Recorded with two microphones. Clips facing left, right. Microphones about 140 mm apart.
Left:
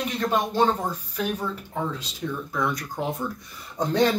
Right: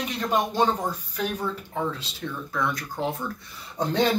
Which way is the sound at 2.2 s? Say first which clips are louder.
Left 1 dB; 5° left (ahead or behind).